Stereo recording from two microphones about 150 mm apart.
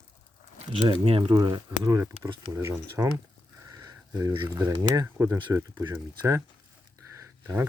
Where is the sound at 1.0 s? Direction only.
35° right (ahead or behind).